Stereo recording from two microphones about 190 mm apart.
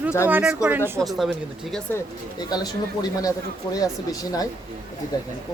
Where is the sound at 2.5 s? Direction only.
20° left (ahead or behind).